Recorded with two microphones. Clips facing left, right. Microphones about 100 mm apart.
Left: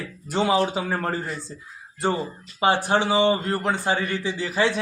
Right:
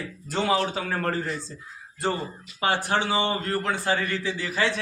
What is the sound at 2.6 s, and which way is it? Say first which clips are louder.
A man's voice: left 4 dB; 20° left (ahead or behind).